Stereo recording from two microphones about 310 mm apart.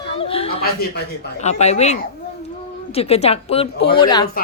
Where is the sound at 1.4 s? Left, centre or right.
Left.